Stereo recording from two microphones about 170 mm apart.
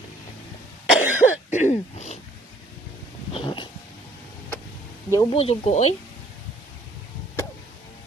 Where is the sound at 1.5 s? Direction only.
45° left (ahead or behind).